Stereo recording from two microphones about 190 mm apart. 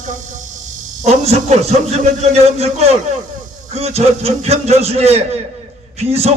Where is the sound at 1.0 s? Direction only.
35° right (ahead or behind).